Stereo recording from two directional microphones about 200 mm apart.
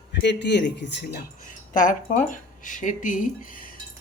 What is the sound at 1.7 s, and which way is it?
Speech, 40° left (ahead or behind).